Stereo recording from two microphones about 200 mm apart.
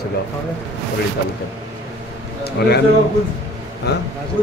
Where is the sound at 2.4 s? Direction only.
55° left (ahead or behind).